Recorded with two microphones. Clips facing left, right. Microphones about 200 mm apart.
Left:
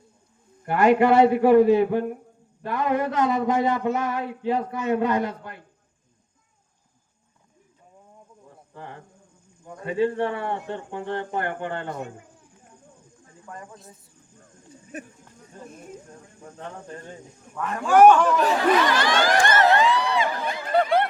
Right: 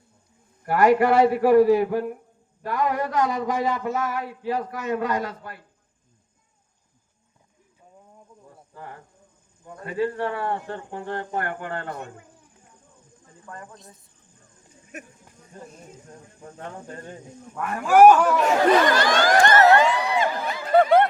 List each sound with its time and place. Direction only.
0.6 s a man's voice: 25° left (ahead or behind)
9.8 s a man's voice: 25° left (ahead or behind)
13.4 s speech: 15° left (ahead or behind)
14.9 s speech: 30° left (ahead or behind)
17.6 s speech: 10° right (ahead or behind)
18.8 s speech: 45° right (ahead or behind)